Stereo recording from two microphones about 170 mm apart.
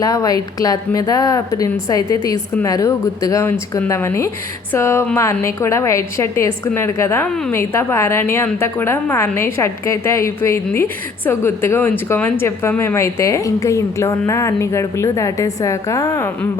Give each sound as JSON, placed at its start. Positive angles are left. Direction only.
{"t": 0.0, "sound": "a woman's voice", "side_deg": 20}